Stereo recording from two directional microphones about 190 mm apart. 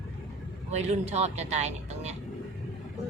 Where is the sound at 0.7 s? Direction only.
35° right (ahead or behind).